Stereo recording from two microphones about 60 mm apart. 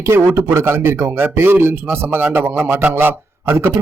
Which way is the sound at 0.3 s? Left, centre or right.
Right.